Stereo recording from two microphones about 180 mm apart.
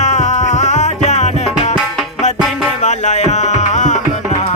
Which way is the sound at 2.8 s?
40° left (ahead or behind).